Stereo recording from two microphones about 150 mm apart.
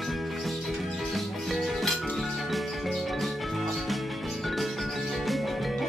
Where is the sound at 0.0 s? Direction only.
Centre (ahead or behind).